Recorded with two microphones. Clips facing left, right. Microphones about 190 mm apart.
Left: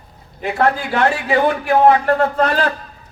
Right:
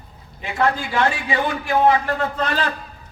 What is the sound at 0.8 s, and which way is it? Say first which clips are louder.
Speech: left 3 dB; 70° left (ahead or behind).